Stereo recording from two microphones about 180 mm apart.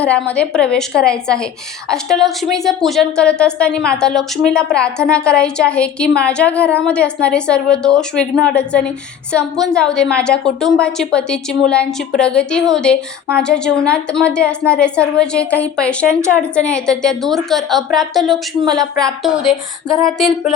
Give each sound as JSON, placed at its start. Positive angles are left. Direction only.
{"t": 0.0, "sound": "a woman's voice", "side_deg": 5}
{"t": 18.6, "sound": "speech", "side_deg": -20}
{"t": 19.2, "sound": "a woman's voice", "side_deg": 0}